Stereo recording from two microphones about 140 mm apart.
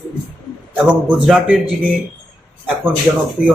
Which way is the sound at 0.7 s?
5° right (ahead or behind).